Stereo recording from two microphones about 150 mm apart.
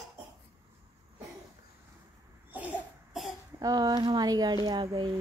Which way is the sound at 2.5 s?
10° right (ahead or behind).